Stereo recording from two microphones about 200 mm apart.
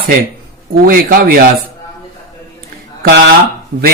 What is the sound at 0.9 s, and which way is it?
Speech, 45° right (ahead or behind).